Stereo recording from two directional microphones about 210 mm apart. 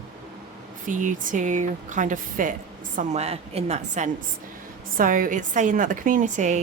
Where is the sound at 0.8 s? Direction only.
40° right (ahead or behind).